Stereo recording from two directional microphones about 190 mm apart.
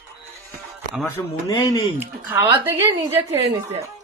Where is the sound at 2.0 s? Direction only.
10° right (ahead or behind).